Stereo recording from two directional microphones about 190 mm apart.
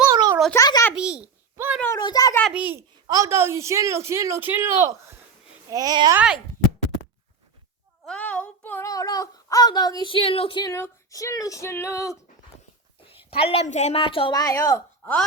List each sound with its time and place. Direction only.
0.0 s a sound: 20° right (ahead or behind)
0.5 s a child's voice: 15° left (ahead or behind)
0.9 s a child's voice: 5° right (ahead or behind)
2.0 s a woman's voice: 20° left (ahead or behind)
2.4 s a child's voice: 5° right (ahead or behind)
2.7 s a woman's voice: 15° right (ahead or behind)
6.1 s a child's voice: 5° right (ahead or behind)
8.0 s speech: 5° left (ahead or behind); by 10.7 s 25° left (ahead or behind)
10.7 s female singing: 15° left (ahead or behind)
13.3 s a woman's voice: 30° left (ahead or behind)